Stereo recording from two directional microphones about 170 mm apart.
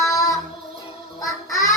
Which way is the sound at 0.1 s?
20° left (ahead or behind).